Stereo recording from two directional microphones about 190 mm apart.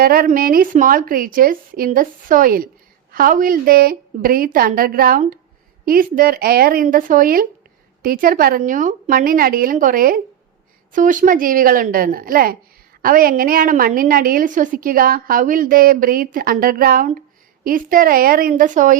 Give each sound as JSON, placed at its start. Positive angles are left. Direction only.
{"t": 0.0, "sound": "a woman's voice", "side_deg": -50}